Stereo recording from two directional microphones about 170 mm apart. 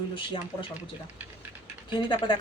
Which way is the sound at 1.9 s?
30° left (ahead or behind).